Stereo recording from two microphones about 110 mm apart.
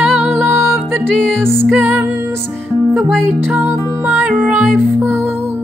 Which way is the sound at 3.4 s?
15° right (ahead or behind).